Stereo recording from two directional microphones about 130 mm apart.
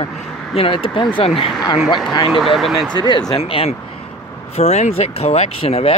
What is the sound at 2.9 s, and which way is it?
Speech, 35° left (ahead or behind).